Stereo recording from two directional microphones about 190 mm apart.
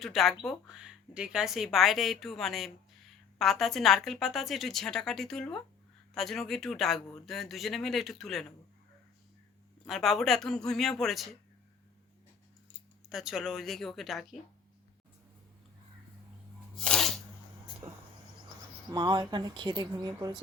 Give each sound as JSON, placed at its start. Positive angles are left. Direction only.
{"t": 0.0, "sound": "a woman's voice", "side_deg": 0}
{"t": 9.8, "sound": "a woman's voice", "side_deg": 0}
{"t": 13.1, "sound": "a woman's voice", "side_deg": 0}
{"t": 16.7, "sound": "sneeze", "side_deg": 5}
{"t": 18.9, "sound": "speech", "side_deg": -25}